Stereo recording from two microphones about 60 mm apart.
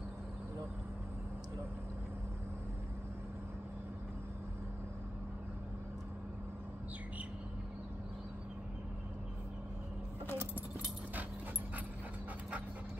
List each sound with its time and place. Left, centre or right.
10.3 s keys jangling: right